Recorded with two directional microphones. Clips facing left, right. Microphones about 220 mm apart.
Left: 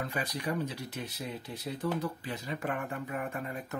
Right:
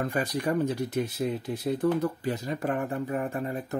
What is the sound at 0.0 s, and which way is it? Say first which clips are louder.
Speech: right 7 dB; 45° right (ahead or behind).